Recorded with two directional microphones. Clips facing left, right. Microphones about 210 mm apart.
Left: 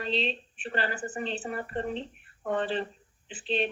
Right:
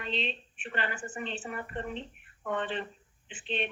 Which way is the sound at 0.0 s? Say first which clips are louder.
Left 5 dB; 35° left (ahead or behind).